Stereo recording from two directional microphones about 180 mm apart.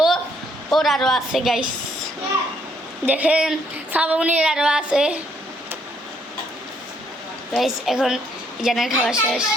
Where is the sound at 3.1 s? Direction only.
10° right (ahead or behind).